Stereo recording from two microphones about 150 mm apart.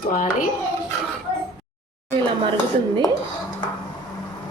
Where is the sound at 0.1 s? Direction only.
65° left (ahead or behind).